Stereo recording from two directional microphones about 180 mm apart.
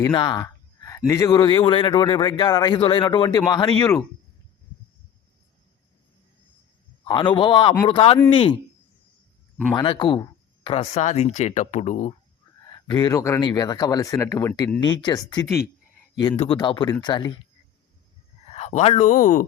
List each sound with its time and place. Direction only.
0.0 s a man's voice: 25° left (ahead or behind)
7.0 s a man's voice: 25° left (ahead or behind)
9.7 s speech: 25° left (ahead or behind)
12.6 s a man's voice: 25° left (ahead or behind)
18.5 s speech: 35° left (ahead or behind)